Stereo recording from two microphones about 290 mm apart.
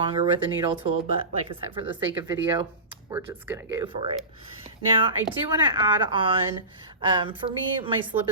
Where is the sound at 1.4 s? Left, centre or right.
Centre.